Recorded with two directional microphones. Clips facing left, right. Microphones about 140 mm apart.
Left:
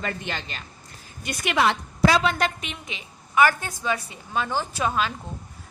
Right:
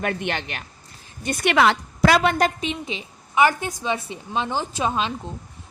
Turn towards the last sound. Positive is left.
turn(degrees=-25)  # may be behind; listen again after turning